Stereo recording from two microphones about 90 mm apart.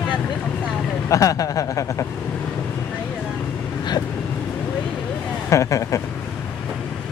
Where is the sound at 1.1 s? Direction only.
40° left (ahead or behind).